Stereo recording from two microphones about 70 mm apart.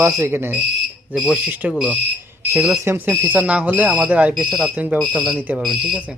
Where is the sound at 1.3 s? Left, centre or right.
Centre.